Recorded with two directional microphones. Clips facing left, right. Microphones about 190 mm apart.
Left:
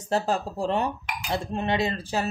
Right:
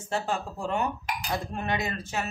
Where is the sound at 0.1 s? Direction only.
35° left (ahead or behind).